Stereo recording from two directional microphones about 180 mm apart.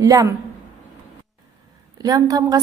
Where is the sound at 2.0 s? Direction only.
20° right (ahead or behind).